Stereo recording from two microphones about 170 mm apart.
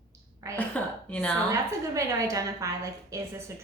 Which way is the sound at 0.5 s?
10° left (ahead or behind).